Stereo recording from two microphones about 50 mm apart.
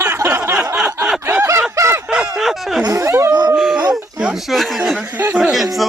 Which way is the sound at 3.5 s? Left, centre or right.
Centre.